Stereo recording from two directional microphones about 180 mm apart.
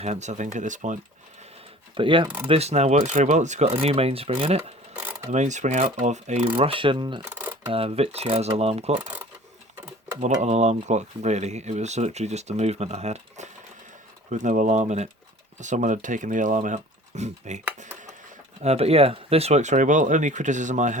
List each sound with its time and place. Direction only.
0.0 s speech: 40° right (ahead or behind)
2.0 s speech: 30° right (ahead or behind)
4.9 s mechanisms: 15° right (ahead or behind)
5.3 s speech: 40° right (ahead or behind)
7.2 s a sound: 10° right (ahead or behind)
7.7 s speech: 35° right (ahead or behind)
10.4 s speech: 40° right (ahead or behind)
18.6 s speech: 35° right (ahead or behind)